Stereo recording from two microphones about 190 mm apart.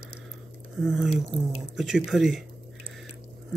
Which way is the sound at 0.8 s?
Centre (ahead or behind).